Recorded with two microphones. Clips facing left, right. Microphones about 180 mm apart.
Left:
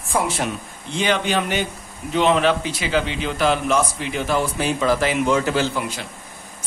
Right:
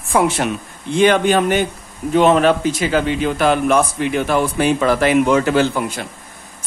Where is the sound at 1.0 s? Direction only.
50° right (ahead or behind).